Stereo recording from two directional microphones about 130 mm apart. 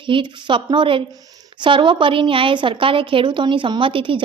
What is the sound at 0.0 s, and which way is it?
A woman's voice, 40° right (ahead or behind).